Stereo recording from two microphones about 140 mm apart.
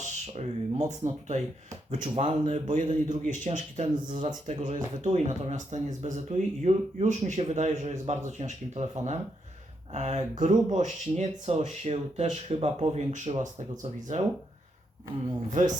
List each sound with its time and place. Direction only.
0.0 s speech: 55° right (ahead or behind)